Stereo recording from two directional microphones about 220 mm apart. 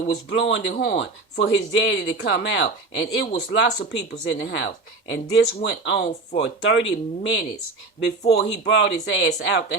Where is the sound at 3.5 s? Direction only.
55° left (ahead or behind).